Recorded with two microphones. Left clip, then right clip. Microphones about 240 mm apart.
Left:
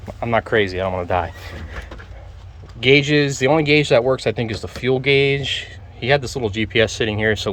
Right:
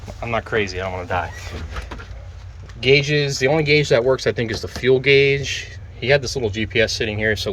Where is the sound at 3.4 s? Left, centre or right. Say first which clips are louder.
Even; centre.